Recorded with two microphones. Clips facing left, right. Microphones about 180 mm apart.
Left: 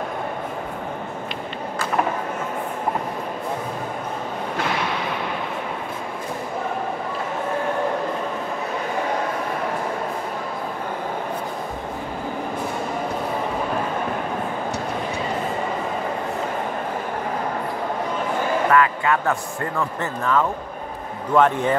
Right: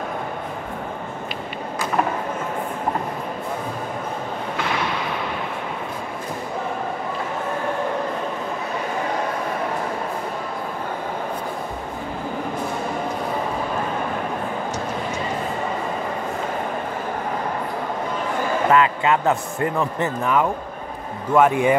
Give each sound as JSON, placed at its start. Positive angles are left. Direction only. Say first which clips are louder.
{"t": 18.7, "sound": "a man's voice", "louder": "right 2 dB", "side_deg": -20}